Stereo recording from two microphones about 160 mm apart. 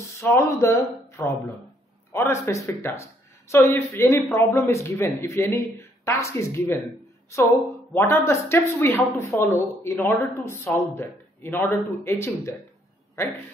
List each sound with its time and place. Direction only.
0.0 s speech: 15° left (ahead or behind)
7.9 s speech: 15° left (ahead or behind)